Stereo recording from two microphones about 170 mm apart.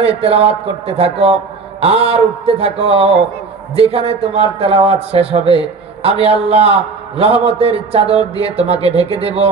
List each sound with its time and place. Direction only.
0.0 s a man's voice: 35° right (ahead or behind)